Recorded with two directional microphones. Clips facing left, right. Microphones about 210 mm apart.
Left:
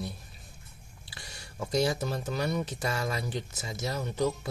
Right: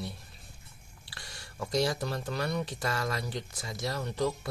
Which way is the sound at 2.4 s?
20° left (ahead or behind).